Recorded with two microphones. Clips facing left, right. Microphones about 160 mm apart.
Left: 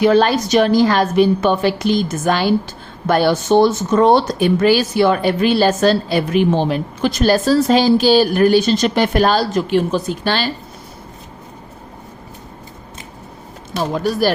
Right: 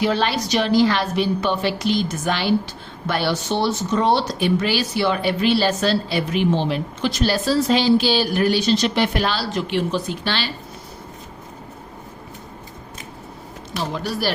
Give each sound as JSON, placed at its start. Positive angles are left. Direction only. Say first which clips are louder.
{"t": 0.0, "sound": "speech", "louder": "left 8 dB", "side_deg": 50}
{"t": 13.9, "sound": "speech", "louder": "left 8 dB", "side_deg": 45}